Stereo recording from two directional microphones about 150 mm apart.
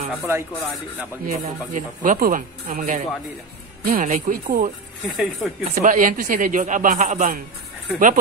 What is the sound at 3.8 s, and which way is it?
Speech, 70° right (ahead or behind).